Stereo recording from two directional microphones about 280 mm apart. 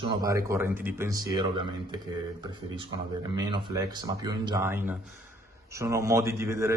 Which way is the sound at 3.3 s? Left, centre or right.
Centre.